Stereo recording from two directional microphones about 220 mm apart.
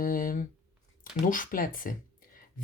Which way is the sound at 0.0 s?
40° left (ahead or behind).